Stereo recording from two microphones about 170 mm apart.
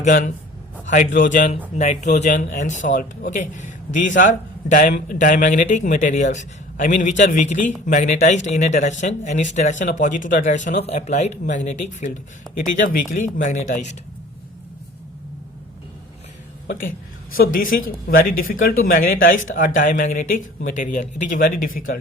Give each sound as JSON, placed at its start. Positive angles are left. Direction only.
{"t": 0.0, "sound": "speech", "side_deg": 50}
{"t": 17.3, "sound": "speech", "side_deg": 55}